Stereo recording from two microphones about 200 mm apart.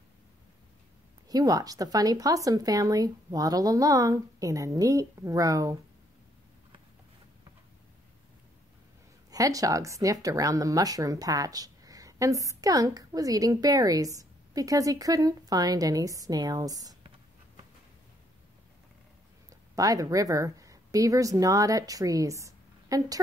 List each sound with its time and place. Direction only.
1.3 s speech: 20° right (ahead or behind)
9.3 s speech: 15° right (ahead or behind)
19.7 s speech: 15° right (ahead or behind)